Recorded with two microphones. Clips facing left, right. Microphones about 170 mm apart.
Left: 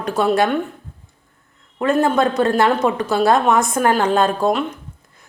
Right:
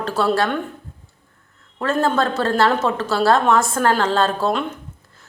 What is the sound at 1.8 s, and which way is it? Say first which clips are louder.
A woman's voice: left 3 dB; 15° left (ahead or behind).